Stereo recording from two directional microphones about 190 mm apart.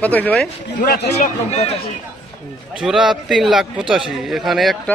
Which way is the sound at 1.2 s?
35° left (ahead or behind).